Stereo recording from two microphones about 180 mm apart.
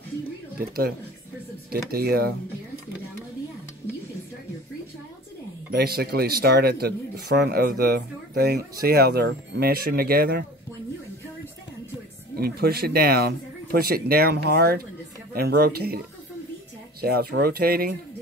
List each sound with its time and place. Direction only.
0.6 s speech: 60° right (ahead or behind)
5.7 s speech: 60° right (ahead or behind)
12.4 s speech: 60° right (ahead or behind)
17.0 s speech: 60° right (ahead or behind)